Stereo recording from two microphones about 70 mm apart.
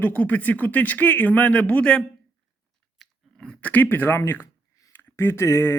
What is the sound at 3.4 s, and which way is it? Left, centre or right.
Speech, left.